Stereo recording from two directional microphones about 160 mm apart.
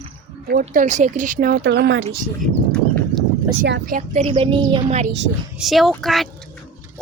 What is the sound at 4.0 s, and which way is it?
A woman's voice, 40° right (ahead or behind).